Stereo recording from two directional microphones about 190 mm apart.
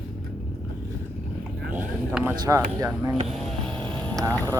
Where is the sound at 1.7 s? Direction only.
10° right (ahead or behind).